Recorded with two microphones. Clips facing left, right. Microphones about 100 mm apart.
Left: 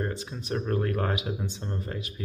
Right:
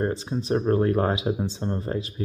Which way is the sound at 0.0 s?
30° right (ahead or behind).